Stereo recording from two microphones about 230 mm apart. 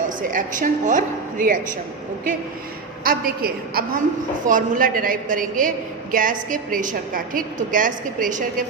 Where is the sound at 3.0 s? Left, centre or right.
Right.